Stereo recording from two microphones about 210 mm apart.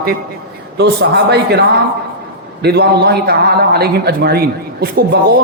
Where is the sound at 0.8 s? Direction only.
50° right (ahead or behind).